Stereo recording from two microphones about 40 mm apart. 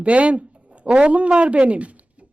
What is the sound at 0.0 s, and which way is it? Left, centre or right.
Speech, right.